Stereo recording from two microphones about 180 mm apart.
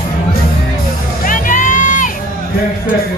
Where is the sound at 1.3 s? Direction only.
45° left (ahead or behind).